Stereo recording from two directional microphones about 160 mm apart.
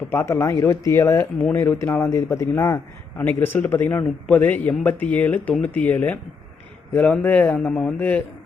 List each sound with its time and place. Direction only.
0.1 s a man's voice: 15° left (ahead or behind)